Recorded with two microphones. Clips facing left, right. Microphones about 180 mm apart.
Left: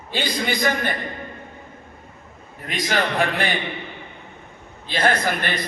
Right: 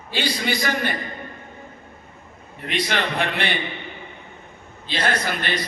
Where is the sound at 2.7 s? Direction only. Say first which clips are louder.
Left 1 dB; 45° left (ahead or behind).